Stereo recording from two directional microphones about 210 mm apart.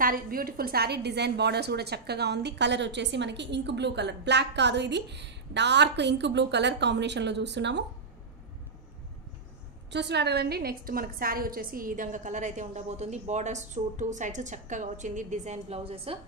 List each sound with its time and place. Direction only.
0.0 s a woman's voice: 45° right (ahead or behind)
9.8 s a woman's voice: 55° right (ahead or behind); by 16.2 s 30° right (ahead or behind)